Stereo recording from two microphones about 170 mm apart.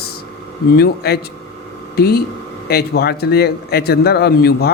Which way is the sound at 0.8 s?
70° left (ahead or behind).